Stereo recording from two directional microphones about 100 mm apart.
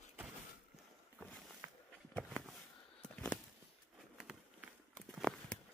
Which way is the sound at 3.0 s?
10° left (ahead or behind).